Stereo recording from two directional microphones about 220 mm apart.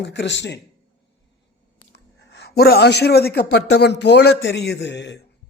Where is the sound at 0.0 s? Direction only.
55° left (ahead or behind).